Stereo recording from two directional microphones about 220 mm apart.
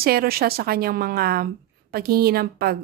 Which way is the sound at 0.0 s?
45° right (ahead or behind).